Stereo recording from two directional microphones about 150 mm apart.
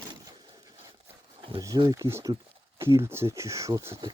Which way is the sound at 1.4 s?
35° right (ahead or behind).